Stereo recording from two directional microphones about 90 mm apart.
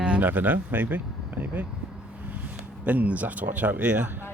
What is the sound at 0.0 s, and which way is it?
Speech, 15° right (ahead or behind).